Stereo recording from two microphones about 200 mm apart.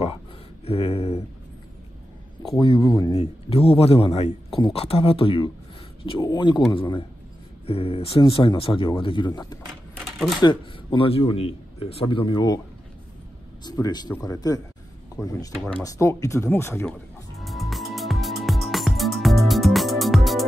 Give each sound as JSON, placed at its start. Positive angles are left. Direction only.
{"t": 0.7, "sound": "a sound", "side_deg": 30}
{"t": 2.6, "sound": "a man's voice", "side_deg": 25}
{"t": 3.2, "sound": "a man's voice", "side_deg": 30}
{"t": 10.0, "sound": "typewriter", "side_deg": 0}
{"t": 10.4, "sound": "a man's voice", "side_deg": 20}
{"t": 13.7, "sound": "a man's voice", "side_deg": 20}
{"t": 15.5, "sound": "speech", "side_deg": 5}
{"t": 15.8, "sound": "speech", "side_deg": 15}
{"t": 17.4, "sound": "music", "side_deg": 0}